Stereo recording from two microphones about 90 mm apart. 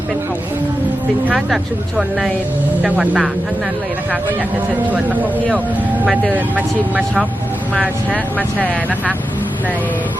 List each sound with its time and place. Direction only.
1.3 s speech: 10° right (ahead or behind)
4.9 s speech: 15° right (ahead or behind)
8.5 s speech: 15° right (ahead or behind)